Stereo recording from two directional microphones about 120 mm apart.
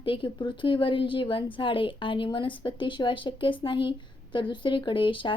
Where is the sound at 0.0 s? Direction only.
45° left (ahead or behind).